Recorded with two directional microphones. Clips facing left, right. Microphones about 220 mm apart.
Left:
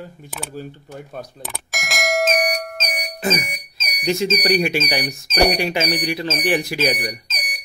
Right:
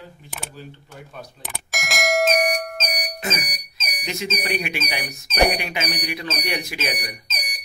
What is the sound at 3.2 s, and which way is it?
Music, 30° left (ahead or behind).